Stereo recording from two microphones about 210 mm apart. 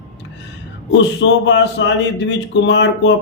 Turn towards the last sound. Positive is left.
turn(degrees=55)  # may be behind; listen again after turning